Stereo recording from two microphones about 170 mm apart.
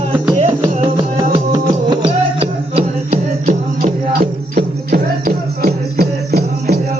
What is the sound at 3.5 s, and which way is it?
Music, 50° right (ahead or behind).